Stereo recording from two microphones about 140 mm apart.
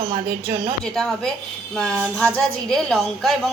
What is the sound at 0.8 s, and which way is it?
A woman's voice, 5° left (ahead or behind).